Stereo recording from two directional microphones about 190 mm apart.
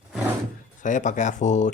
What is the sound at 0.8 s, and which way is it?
Speech, 40° left (ahead or behind).